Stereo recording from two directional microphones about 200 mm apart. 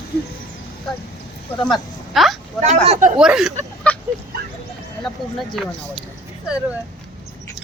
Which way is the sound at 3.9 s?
5° left (ahead or behind).